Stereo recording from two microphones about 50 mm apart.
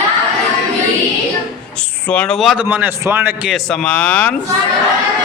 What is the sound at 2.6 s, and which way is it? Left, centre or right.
Speech, right.